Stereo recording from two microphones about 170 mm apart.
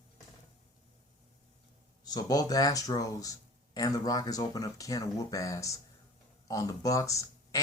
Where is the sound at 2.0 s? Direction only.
20° left (ahead or behind).